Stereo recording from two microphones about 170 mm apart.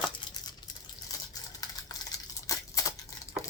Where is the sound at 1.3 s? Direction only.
20° left (ahead or behind).